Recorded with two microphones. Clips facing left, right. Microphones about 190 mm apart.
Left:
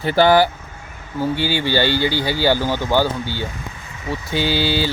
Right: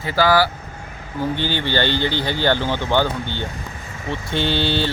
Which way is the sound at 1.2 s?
10° left (ahead or behind).